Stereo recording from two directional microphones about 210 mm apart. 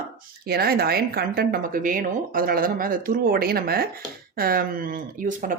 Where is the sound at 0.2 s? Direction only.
45° right (ahead or behind).